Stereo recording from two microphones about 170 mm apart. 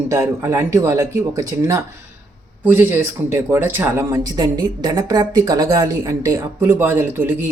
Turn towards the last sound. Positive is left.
turn(degrees=-15)  # may be behind; listen again after turning